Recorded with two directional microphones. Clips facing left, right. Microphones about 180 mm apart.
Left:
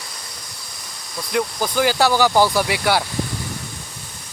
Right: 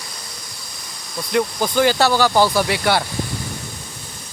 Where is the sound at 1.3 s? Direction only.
Centre (ahead or behind).